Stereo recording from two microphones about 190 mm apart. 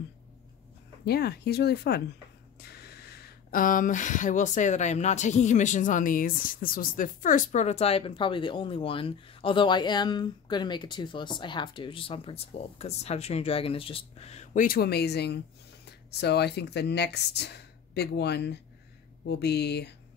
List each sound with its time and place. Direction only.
1.0 s speech: 55° left (ahead or behind)